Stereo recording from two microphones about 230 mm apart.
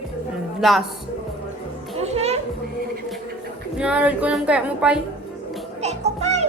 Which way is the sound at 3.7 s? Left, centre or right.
Centre.